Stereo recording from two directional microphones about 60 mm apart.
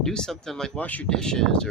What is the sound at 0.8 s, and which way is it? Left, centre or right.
Speech, left.